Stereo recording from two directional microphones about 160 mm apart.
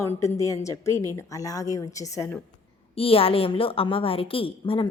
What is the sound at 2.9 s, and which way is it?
A woman's voice, 35° left (ahead or behind).